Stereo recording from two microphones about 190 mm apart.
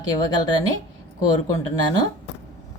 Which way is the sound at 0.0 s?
20° left (ahead or behind).